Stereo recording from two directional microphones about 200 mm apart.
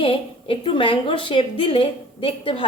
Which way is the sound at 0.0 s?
25° left (ahead or behind).